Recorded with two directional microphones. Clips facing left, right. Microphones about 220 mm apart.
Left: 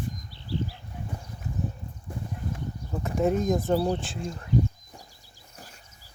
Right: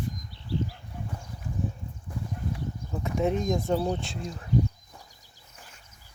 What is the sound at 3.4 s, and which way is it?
Speech, 5° left (ahead or behind).